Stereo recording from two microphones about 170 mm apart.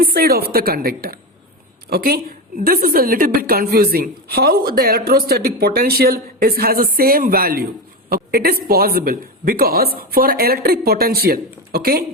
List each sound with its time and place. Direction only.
0.0 s a woman's voice: 60° right (ahead or behind)